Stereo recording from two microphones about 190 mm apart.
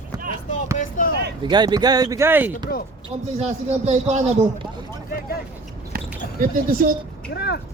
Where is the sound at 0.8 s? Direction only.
45° left (ahead or behind).